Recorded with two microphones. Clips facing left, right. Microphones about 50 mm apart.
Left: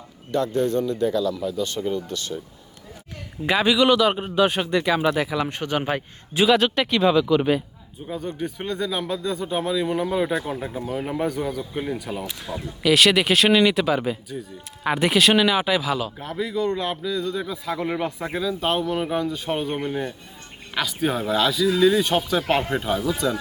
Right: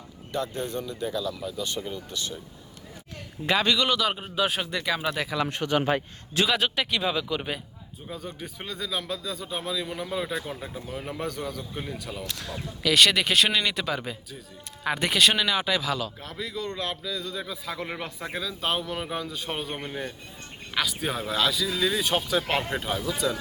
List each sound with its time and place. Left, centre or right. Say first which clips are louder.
0.3 s speech: left 8 dB; centre
3.4 s speech: left 5 dB; centre
5.6 s a man's voice: even; left
5.9 s speech: even; centre
6.5 s speech: left 7 dB; centre